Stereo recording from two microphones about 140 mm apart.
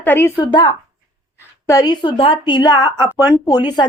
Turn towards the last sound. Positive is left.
turn(degrees=30)  # may be behind; listen again after turning